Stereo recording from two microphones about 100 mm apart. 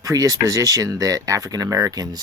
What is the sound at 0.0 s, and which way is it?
Speech, 35° right (ahead or behind).